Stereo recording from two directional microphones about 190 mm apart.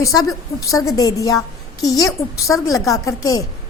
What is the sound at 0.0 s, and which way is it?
A woman's voice, 20° left (ahead or behind).